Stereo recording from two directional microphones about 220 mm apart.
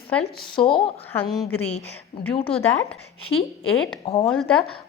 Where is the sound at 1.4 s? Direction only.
10° left (ahead or behind).